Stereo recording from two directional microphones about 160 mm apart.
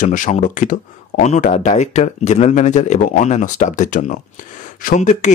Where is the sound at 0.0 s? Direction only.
50° left (ahead or behind).